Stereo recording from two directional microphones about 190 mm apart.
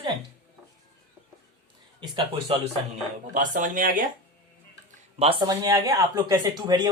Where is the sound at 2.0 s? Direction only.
25° right (ahead or behind).